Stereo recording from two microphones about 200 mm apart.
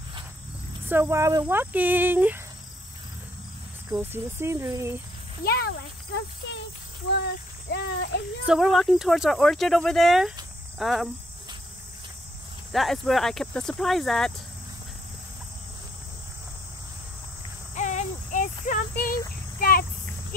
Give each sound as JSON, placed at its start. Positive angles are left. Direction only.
{"t": 0.8, "sound": "speech", "side_deg": -10}
{"t": 3.9, "sound": "speech", "side_deg": -10}
{"t": 5.4, "sound": "speech", "side_deg": 50}
{"t": 7.7, "sound": "speech", "side_deg": 55}
{"t": 8.5, "sound": "speech", "side_deg": 0}
{"t": 12.7, "sound": "speech", "side_deg": 0}
{"t": 17.7, "sound": "child singing", "side_deg": 35}
{"t": 19.6, "sound": "a sound", "side_deg": 45}